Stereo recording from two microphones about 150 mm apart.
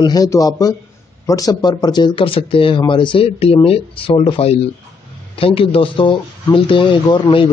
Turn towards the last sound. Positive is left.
turn(degrees=35)  # may be behind; listen again after turning